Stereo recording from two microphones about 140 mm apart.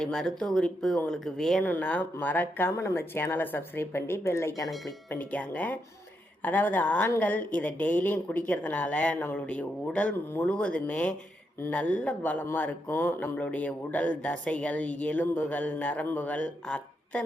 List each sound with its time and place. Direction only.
0.0 s speech: 5° left (ahead or behind); by 4.7 s 20° left (ahead or behind)
5.1 s speech: 10° left (ahead or behind)